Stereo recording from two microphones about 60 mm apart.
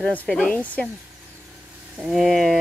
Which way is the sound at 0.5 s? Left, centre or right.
Left.